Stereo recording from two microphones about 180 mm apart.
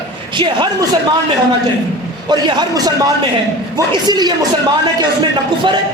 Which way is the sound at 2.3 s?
25° right (ahead or behind).